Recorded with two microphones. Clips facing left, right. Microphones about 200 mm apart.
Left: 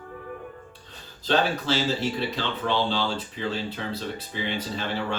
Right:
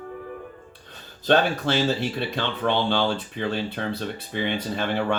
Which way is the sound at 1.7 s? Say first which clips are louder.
Right 2 dB; 60° right (ahead or behind).